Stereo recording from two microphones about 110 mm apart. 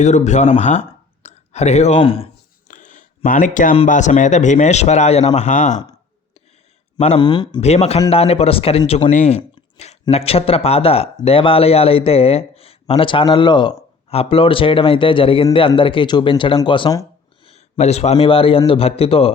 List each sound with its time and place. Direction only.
0.0 s speech: 90° left
1.2 s a sound: 90° left
2.0 s speech: 55° left (ahead or behind)
3.8 s speech: 90° left
7.2 s a man's voice: 45° left (ahead or behind)
7.6 s speech: 75° left (ahead or behind); by 8.8 s 60° left (ahead or behind)
8.9 s speech: 75° left (ahead or behind); by 13.7 s 45° left (ahead or behind)
14.1 s a man's voice: 60° left (ahead or behind)
17.4 s a man's voice: 75° left (ahead or behind); by 19.3 s 60° left (ahead or behind)